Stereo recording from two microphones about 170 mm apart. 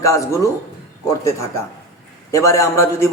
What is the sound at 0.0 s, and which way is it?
Speech, 20° left (ahead or behind).